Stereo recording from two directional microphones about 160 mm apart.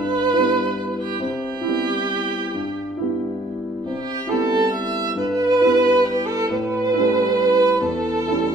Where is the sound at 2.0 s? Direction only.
30° right (ahead or behind).